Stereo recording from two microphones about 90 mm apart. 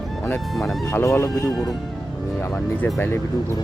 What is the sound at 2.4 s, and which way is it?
Speech, 25° left (ahead or behind).